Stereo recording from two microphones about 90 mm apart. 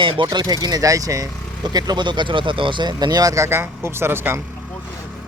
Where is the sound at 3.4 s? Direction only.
30° right (ahead or behind).